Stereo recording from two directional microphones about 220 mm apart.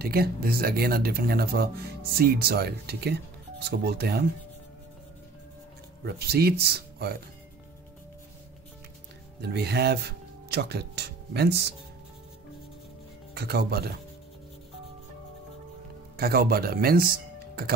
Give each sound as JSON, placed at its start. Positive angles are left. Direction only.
{"t": 0.0, "sound": "speech", "side_deg": -45}
{"t": 6.0, "sound": "speech", "side_deg": -45}
{"t": 9.4, "sound": "speech", "side_deg": -50}
{"t": 13.3, "sound": "speech", "side_deg": -45}
{"t": 16.2, "sound": "speech", "side_deg": -45}